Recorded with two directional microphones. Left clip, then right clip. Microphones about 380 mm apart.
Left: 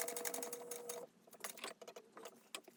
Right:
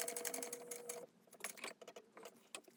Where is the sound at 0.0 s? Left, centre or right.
Centre.